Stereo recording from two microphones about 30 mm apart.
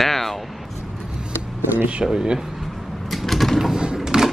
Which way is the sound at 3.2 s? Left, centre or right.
Centre.